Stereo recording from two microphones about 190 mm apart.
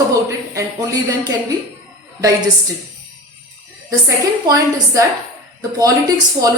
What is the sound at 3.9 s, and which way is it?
A woman's voice, 20° right (ahead or behind).